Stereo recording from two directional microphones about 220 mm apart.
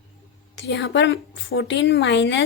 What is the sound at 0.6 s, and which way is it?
A woman's voice, 55° left (ahead or behind).